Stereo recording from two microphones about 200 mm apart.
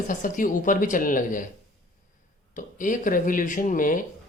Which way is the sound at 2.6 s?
40° left (ahead or behind).